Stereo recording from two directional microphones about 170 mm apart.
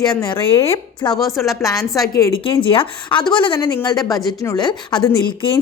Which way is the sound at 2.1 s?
30° left (ahead or behind).